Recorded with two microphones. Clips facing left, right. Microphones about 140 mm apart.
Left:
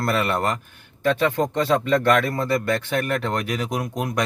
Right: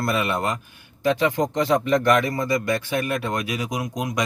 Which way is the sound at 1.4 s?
15° right (ahead or behind).